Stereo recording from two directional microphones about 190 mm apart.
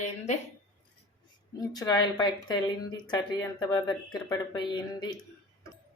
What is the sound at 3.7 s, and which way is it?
Speech, 20° left (ahead or behind).